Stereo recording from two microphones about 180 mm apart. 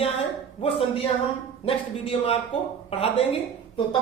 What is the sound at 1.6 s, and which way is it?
Speech, 30° left (ahead or behind).